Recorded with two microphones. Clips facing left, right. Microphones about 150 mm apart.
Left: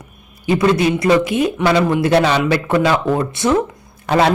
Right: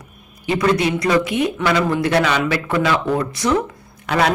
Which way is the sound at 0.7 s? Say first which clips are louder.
Left 2 dB; 25° left (ahead or behind).